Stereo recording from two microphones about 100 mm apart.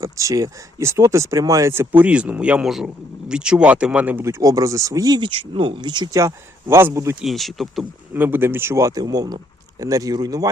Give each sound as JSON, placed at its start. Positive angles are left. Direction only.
{"t": 0.0, "sound": "speech", "side_deg": -30}
{"t": 4.2, "sound": "speech", "side_deg": -30}
{"t": 6.1, "sound": "speech", "side_deg": -30}
{"t": 7.2, "sound": "speech", "side_deg": 0}
{"t": 8.1, "sound": "speech", "side_deg": -20}